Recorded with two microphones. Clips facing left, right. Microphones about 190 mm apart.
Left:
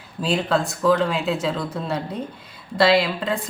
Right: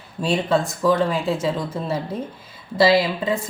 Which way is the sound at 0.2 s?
Centre (ahead or behind).